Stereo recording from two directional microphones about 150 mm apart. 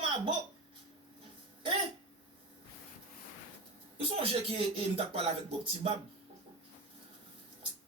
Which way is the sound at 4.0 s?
35° right (ahead or behind).